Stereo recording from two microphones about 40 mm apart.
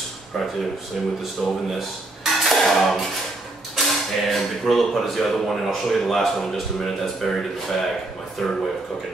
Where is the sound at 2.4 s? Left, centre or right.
Centre.